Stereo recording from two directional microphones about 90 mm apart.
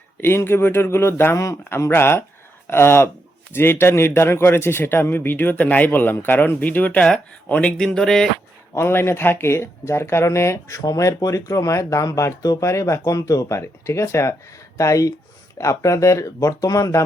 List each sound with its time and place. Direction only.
0.2 s a man's voice: 25° left (ahead or behind); by 8.3 s 5° left (ahead or behind)
8.7 s speech: 25° left (ahead or behind)